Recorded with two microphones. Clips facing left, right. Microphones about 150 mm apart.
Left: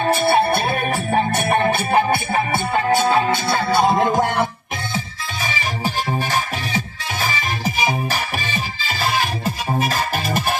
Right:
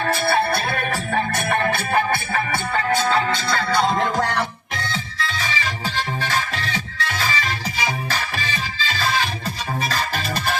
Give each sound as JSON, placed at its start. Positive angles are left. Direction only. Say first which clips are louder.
{"t": 0.0, "sound": "music", "louder": "left 4 dB", "side_deg": 20}